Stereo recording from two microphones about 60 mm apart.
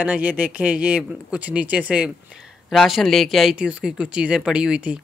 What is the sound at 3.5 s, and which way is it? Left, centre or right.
Speech, centre.